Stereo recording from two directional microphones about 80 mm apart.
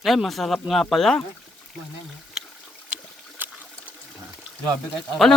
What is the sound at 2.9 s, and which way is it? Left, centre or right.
Boat, right.